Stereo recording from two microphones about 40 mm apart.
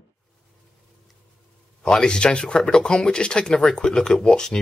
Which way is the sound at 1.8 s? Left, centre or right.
Left.